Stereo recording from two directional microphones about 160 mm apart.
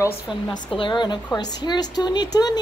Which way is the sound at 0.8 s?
30° left (ahead or behind).